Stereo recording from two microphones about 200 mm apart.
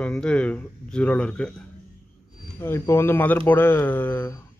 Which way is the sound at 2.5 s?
10° left (ahead or behind).